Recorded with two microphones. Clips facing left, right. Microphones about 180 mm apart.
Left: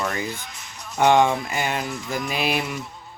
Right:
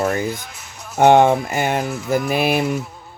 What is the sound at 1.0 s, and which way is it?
Speech, 50° right (ahead or behind).